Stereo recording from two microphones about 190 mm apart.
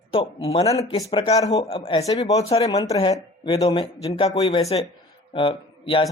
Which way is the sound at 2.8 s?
20° left (ahead or behind).